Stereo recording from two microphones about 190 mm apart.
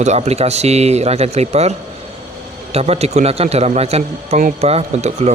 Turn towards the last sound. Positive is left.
turn(degrees=-35)  # may be behind; listen again after turning